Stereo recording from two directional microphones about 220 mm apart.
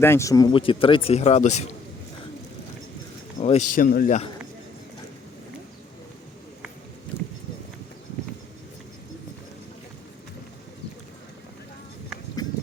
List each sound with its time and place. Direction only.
0.0 s speech: 10° left (ahead or behind); by 1.6 s 30° left (ahead or behind)
3.4 s speech: 30° left (ahead or behind)
3.8 s speech: 40° left (ahead or behind)